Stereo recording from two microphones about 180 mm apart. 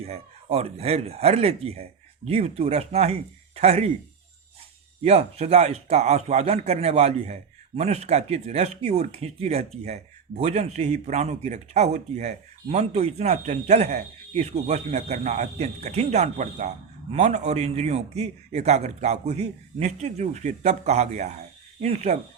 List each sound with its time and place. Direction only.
0.0 s speech: 35° right (ahead or behind)
5.0 s speech: 35° right (ahead or behind)